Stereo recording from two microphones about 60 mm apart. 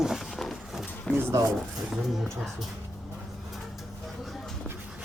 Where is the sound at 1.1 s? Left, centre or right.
Centre.